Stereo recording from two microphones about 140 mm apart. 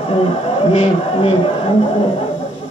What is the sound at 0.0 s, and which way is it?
A man's voice, 45° left (ahead or behind).